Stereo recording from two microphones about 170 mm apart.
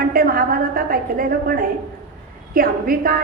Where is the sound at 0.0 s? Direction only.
60° right (ahead or behind).